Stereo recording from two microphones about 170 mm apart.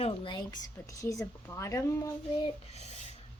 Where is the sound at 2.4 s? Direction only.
35° left (ahead or behind).